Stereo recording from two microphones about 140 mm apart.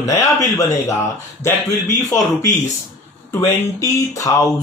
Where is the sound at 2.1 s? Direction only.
25° left (ahead or behind).